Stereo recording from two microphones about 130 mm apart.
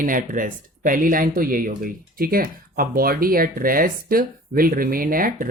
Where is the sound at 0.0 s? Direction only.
90° right.